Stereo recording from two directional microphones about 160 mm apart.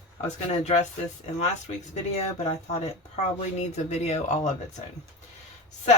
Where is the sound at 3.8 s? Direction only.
45° left (ahead or behind).